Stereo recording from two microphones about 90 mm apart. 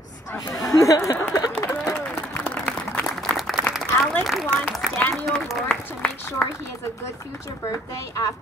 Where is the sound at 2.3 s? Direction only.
15° left (ahead or behind).